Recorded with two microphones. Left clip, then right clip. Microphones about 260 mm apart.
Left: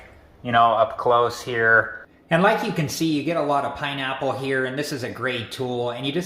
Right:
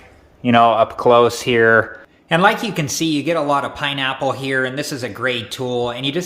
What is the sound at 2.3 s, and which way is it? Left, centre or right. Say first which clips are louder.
Speech: right 4 dB; right.